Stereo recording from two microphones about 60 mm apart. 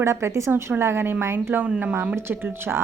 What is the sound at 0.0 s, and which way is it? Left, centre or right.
Speech, right.